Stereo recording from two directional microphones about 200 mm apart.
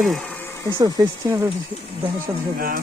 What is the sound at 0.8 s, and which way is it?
Speech, 15° right (ahead or behind).